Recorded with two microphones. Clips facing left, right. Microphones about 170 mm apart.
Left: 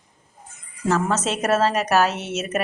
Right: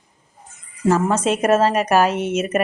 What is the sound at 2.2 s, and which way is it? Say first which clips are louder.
Speech: right 7 dB; 50° right (ahead or behind).